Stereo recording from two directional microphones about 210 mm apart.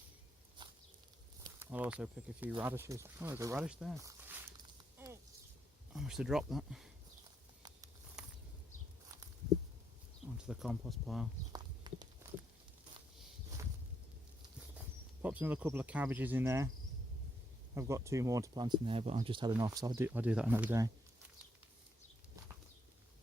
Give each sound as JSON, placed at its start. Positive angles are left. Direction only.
{"t": 1.5, "sound": "speech", "side_deg": -10}
{"t": 3.9, "sound": "walk", "side_deg": -10}
{"t": 5.9, "sound": "speech", "side_deg": 0}
{"t": 10.3, "sound": "speech", "side_deg": -5}
{"t": 11.5, "sound": "a sound", "side_deg": -20}
{"t": 15.2, "sound": "speech", "side_deg": -5}
{"t": 17.7, "sound": "speech", "side_deg": -15}